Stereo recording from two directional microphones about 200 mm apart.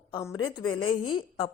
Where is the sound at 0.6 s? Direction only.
90° left.